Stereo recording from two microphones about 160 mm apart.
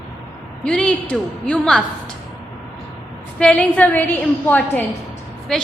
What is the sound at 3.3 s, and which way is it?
A woman's voice, 5° left (ahead or behind).